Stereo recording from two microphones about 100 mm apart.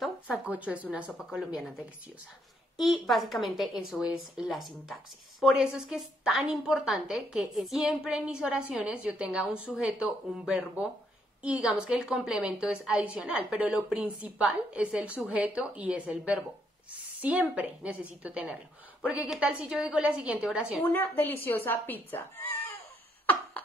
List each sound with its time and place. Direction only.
0.5 s a woman's voice: 15° right (ahead or behind)
1.3 s a woman's voice: 5° right (ahead or behind)
2.8 s a woman's voice: centre (ahead or behind)
20.8 s speech: 20° left (ahead or behind)